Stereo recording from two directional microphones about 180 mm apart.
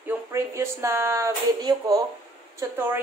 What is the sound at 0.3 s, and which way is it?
Speech, 15° right (ahead or behind).